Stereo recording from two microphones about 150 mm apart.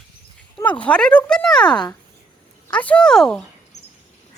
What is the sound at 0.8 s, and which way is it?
Speech, 5° left (ahead or behind).